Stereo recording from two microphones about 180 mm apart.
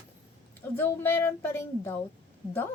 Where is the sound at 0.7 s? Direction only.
10° left (ahead or behind).